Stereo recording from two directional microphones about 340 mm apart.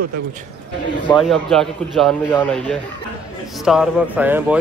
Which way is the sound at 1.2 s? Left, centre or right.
Centre.